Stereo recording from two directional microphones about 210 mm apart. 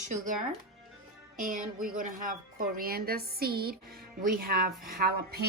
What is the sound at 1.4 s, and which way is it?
A woman's voice, 40° right (ahead or behind).